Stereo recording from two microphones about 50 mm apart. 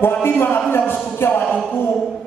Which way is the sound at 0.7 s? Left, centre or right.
Left.